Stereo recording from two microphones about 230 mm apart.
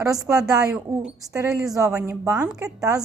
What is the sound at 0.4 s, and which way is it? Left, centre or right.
A woman's voice, centre.